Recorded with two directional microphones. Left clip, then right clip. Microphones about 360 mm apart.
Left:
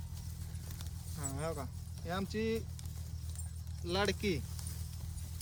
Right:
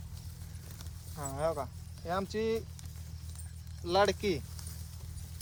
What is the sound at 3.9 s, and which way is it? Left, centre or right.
Speech, centre.